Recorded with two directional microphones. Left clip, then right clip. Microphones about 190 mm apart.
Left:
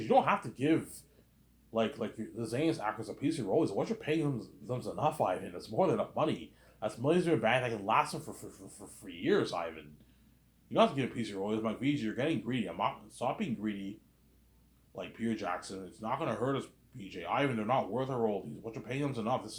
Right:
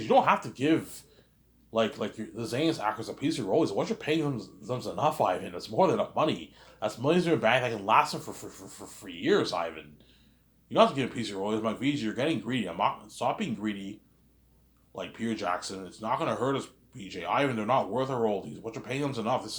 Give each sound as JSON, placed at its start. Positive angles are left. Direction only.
{"t": 0.0, "sound": "speech", "side_deg": -20}
{"t": 14.9, "sound": "speech", "side_deg": -20}